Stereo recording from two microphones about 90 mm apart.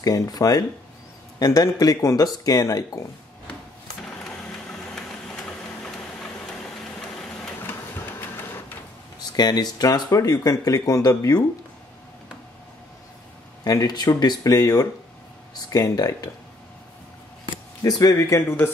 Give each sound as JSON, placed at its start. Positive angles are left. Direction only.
{"t": 0.0, "sound": "speech", "side_deg": 45}
{"t": 7.0, "sound": "a sound", "side_deg": 10}
{"t": 8.2, "sound": "printer", "side_deg": 25}
{"t": 9.3, "sound": "speech", "side_deg": 50}
{"t": 13.7, "sound": "speech", "side_deg": 45}
{"t": 17.8, "sound": "speech", "side_deg": 45}
{"t": 18.1, "sound": "speech", "side_deg": 35}